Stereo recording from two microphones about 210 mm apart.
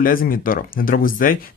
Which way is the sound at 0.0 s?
40° left (ahead or behind).